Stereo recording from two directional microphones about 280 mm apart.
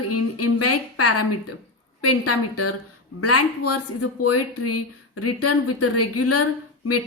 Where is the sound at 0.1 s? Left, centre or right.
Left.